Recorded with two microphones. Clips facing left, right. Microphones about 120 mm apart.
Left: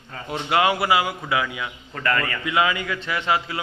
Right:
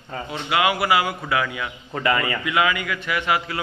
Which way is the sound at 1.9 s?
10° right (ahead or behind).